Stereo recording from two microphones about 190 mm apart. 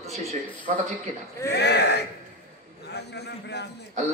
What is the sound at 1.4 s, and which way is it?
A man's voice, 60° left (ahead or behind).